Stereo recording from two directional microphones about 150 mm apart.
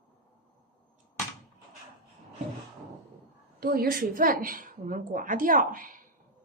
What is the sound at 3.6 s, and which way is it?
A woman's voice, 80° right.